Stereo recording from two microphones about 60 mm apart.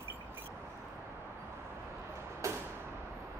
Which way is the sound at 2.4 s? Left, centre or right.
Right.